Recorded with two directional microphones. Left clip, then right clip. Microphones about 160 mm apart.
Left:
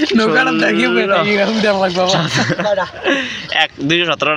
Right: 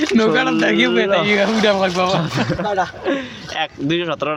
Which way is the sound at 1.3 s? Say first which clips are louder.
Left 1 dB; 45° left (ahead or behind).